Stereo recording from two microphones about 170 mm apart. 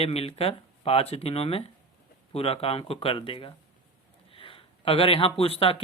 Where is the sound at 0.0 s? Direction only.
35° left (ahead or behind).